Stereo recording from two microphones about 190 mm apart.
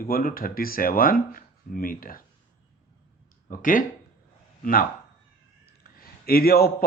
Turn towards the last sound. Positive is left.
turn(degrees=50)  # may be behind; listen again after turning